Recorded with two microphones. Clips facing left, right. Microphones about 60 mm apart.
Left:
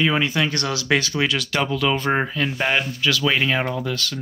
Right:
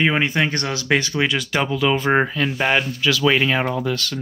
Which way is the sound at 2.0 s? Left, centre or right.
Right.